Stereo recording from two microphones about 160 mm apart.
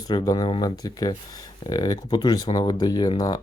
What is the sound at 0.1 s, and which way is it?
Speech, 25° left (ahead or behind).